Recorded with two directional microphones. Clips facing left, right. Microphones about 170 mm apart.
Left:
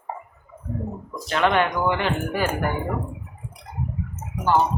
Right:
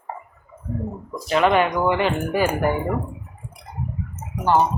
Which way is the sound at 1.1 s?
5° right (ahead or behind).